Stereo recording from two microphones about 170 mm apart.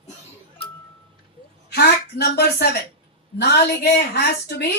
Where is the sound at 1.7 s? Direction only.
70° left (ahead or behind).